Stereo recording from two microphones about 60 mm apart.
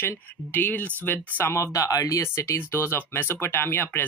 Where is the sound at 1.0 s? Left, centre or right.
Left.